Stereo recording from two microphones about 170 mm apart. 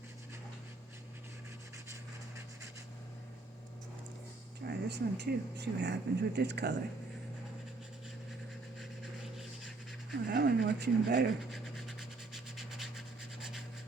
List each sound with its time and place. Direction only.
4.6 s speech: 85° right
8.8 s a sound: centre (ahead or behind)
10.2 s speech: 75° right (ahead or behind)
11.5 s rub: centre (ahead or behind)